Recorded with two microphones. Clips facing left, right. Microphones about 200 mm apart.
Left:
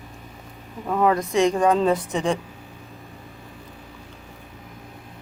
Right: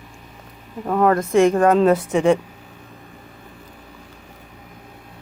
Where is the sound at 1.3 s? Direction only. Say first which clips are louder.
Right 8 dB; 55° right (ahead or behind).